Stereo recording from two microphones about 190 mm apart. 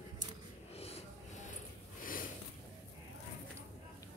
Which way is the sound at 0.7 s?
35° left (ahead or behind).